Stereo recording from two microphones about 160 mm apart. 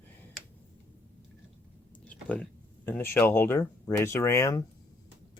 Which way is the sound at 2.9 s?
15° left (ahead or behind).